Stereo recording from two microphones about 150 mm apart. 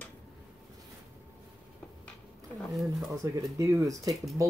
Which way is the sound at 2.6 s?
Centre (ahead or behind).